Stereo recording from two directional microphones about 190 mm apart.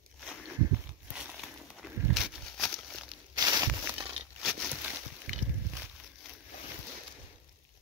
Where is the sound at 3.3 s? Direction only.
20° right (ahead or behind).